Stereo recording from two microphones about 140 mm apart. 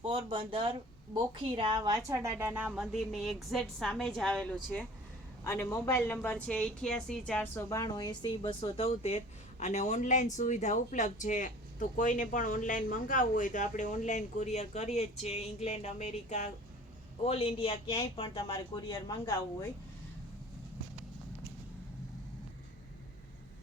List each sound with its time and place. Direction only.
0.0 s a woman's voice: 35° right (ahead or behind); by 4.5 s 5° left (ahead or behind)
5.4 s speech: 20° left (ahead or behind)
6.2 s a woman's voice: 5° left (ahead or behind)
7.5 s speech: 25° left (ahead or behind); by 16.5 s 55° left (ahead or behind)
17.2 s a man's voice: 40° left (ahead or behind)
17.8 s speech: 30° left (ahead or behind)